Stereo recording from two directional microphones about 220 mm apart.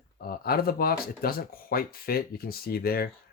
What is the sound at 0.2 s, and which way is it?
Speech, 45° left (ahead or behind).